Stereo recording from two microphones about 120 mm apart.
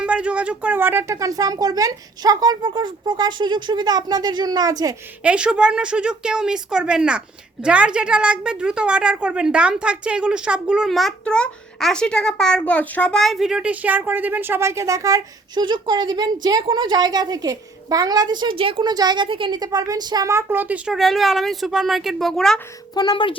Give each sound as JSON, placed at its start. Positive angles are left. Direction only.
{"t": 0.0, "sound": "a woman's voice", "side_deg": -10}
{"t": 5.2, "sound": "a woman's voice", "side_deg": -10}
{"t": 15.6, "sound": "a woman's voice", "side_deg": -40}
{"t": 23.0, "sound": "speech", "side_deg": 40}